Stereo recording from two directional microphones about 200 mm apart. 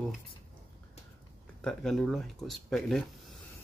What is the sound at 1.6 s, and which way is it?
Speech, 5° left (ahead or behind).